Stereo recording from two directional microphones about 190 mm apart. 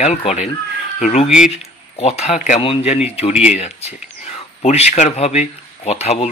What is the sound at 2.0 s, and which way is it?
Speech, 35° left (ahead or behind).